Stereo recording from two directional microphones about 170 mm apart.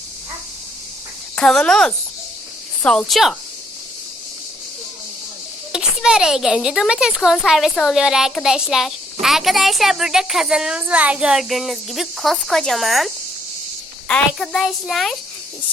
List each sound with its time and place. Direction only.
1.4 s a woman's voice: 5° left (ahead or behind)
5.7 s a woman's voice: 5° right (ahead or behind)
14.1 s a woman's voice: 5° left (ahead or behind)